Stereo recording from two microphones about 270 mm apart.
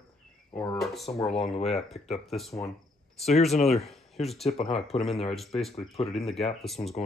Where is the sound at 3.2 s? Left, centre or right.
Left.